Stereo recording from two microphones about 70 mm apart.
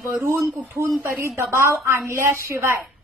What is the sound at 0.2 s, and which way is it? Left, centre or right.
A woman's voice, right.